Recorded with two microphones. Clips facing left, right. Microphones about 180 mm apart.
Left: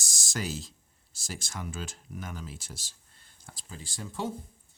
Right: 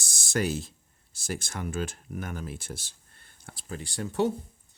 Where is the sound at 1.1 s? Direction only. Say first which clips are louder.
Right 6 dB; 60° right (ahead or behind).